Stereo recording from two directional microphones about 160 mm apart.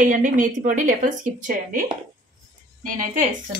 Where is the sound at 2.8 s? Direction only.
55° right (ahead or behind).